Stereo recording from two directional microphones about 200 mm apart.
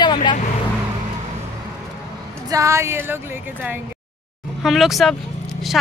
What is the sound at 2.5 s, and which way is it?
Female singing, 15° right (ahead or behind).